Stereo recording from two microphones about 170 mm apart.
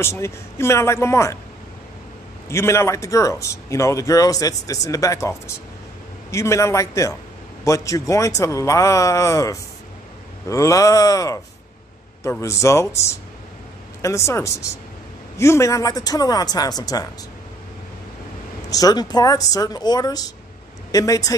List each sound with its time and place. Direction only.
0.0 s speech: 15° left (ahead or behind)
2.5 s speech: 15° left (ahead or behind)
6.3 s speech: 15° left (ahead or behind)
18.7 s speech: 20° left (ahead or behind)